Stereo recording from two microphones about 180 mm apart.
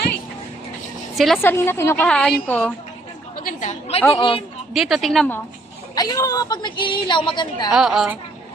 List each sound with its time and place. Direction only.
1.1 s a woman's voice: centre (ahead or behind)
1.4 s a woman's voice: 15° left (ahead or behind)
3.4 s a woman's voice: 40° left (ahead or behind)
4.7 s speech: centre (ahead or behind)
5.9 s a woman's voice: 20° left (ahead or behind)
7.7 s speech: 5° right (ahead or behind)